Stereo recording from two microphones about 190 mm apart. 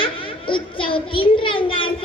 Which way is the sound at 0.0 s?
25° left (ahead or behind).